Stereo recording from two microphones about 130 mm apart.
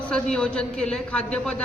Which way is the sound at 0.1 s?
10° left (ahead or behind).